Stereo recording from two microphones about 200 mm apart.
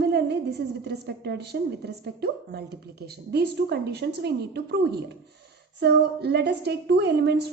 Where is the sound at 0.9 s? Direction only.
55° right (ahead or behind).